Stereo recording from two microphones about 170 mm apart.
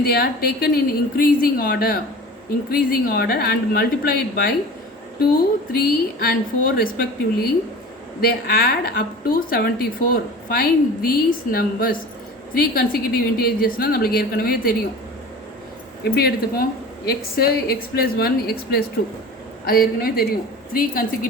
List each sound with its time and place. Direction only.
0.0 s speech: 65° left (ahead or behind)
5.7 s speech: 60° left (ahead or behind)
16.0 s speech: 65° left (ahead or behind)